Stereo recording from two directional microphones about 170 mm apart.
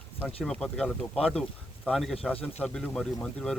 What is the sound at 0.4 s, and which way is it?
A man's voice, centre (ahead or behind).